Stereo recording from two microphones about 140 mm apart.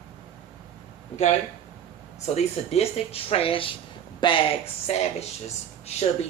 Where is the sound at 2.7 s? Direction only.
45° left (ahead or behind).